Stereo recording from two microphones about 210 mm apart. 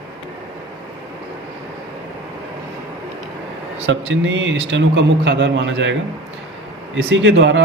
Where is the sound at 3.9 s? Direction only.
65° right (ahead or behind).